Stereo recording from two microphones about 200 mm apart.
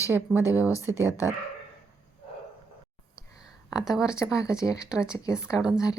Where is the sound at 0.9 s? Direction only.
15° left (ahead or behind).